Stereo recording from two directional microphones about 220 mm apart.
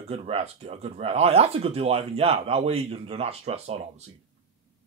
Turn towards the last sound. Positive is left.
turn(degrees=-30)  # may be behind; listen again after turning